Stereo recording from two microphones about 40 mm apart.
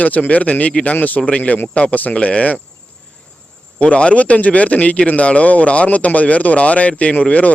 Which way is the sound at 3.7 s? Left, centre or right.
Left.